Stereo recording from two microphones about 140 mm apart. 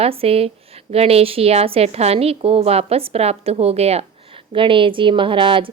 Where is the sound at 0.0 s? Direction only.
45° right (ahead or behind).